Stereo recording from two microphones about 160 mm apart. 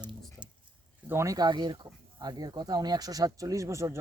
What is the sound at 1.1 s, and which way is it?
Speech, 20° right (ahead or behind).